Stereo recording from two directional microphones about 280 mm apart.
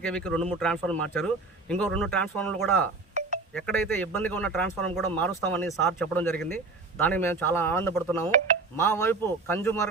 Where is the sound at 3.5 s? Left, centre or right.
Centre.